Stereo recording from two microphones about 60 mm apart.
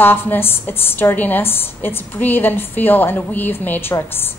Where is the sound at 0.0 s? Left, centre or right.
Left.